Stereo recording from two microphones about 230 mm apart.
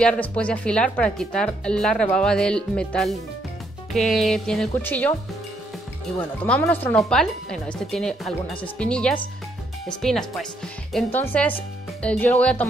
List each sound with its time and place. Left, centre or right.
0.0 s speech: centre
6.4 s speech: centre